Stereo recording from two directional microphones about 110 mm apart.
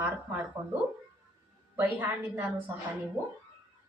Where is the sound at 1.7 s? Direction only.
15° right (ahead or behind).